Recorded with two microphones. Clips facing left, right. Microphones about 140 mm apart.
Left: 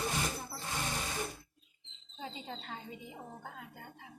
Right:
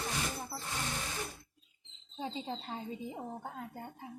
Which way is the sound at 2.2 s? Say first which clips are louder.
Right 5 dB; 30° right (ahead or behind).